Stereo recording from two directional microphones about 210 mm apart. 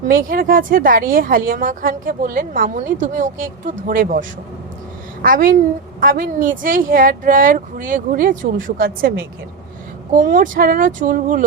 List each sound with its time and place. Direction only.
0.1 s a woman's voice: 40° right (ahead or behind)